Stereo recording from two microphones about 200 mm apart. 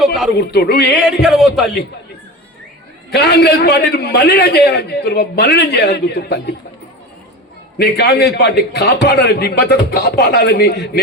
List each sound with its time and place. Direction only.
0.3 s a man's voice: 50° left (ahead or behind)
1.0 s speech: centre (ahead or behind)
3.1 s a man's voice: 55° left (ahead or behind)
7.8 s a man's voice: 50° left (ahead or behind)